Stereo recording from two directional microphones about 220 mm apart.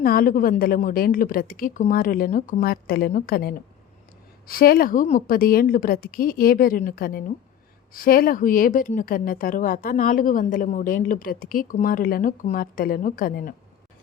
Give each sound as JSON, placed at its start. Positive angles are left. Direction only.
{"t": 0.0, "sound": "speech", "side_deg": 40}